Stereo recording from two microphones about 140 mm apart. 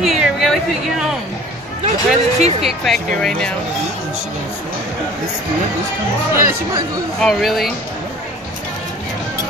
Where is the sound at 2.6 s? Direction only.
Centre (ahead or behind).